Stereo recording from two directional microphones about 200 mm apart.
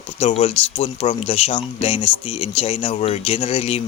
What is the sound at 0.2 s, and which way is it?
Speech, 30° left (ahead or behind).